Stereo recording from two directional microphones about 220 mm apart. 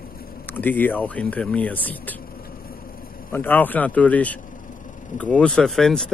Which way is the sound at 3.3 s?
10° left (ahead or behind).